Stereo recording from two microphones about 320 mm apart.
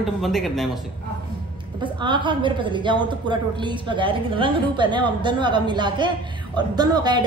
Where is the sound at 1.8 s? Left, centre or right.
Centre.